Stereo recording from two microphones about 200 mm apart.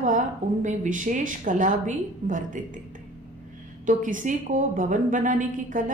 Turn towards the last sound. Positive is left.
turn(degrees=-40)  # may be behind; listen again after turning